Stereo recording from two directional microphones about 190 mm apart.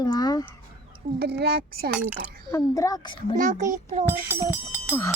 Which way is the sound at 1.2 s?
55° right (ahead or behind).